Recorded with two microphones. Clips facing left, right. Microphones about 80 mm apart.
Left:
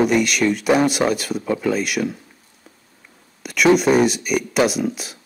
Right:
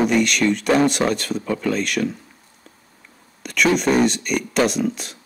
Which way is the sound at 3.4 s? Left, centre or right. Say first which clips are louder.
Left 3 dB; centre.